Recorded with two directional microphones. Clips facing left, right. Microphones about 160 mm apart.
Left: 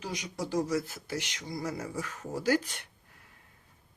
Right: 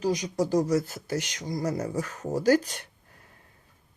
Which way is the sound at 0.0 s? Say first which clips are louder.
Right 10 dB; 40° right (ahead or behind).